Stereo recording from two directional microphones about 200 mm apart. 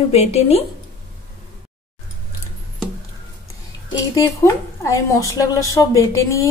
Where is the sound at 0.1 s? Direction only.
30° left (ahead or behind).